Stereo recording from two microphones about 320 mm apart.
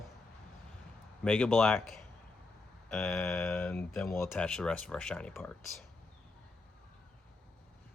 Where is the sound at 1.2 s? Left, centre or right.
Centre.